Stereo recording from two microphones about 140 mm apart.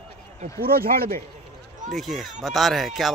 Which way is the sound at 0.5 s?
90° right.